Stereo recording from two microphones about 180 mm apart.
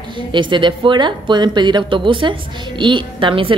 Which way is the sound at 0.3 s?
25° right (ahead or behind).